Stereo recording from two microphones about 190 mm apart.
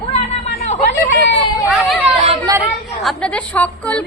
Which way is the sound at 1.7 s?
Centre (ahead or behind).